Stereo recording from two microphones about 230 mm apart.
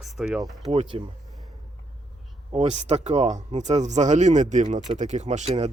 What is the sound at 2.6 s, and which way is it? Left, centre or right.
Speech, right.